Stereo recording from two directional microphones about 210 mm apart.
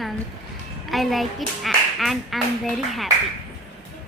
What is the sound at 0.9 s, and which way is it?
A child's voice, centre (ahead or behind).